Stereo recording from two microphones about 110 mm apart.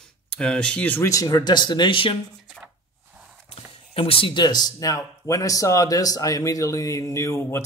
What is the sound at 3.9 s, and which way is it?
Speech, 60° left (ahead or behind).